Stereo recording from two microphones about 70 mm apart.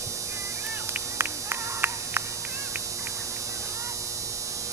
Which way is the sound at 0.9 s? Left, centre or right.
Right.